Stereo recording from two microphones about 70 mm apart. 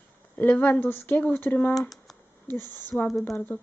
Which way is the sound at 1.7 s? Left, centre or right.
Centre.